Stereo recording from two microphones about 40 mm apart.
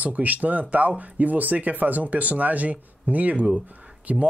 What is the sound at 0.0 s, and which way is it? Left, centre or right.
Speech, right.